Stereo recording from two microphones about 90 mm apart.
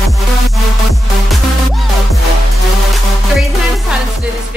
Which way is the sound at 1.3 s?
Centre (ahead or behind).